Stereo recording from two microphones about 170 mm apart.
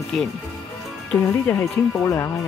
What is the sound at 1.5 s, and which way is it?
Speech, 15° left (ahead or behind).